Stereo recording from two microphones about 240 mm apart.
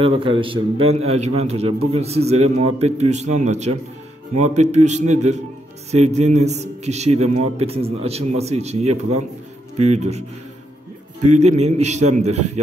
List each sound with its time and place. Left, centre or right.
0.0 s a man's voice: right
11.2 s a man's voice: right